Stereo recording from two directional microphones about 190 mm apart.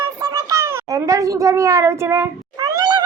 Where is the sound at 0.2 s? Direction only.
20° right (ahead or behind).